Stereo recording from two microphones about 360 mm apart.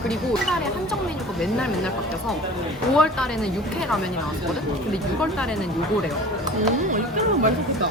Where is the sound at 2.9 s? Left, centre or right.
Centre.